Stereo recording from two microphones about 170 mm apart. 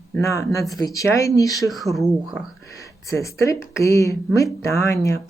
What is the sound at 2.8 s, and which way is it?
Speech, 20° left (ahead or behind).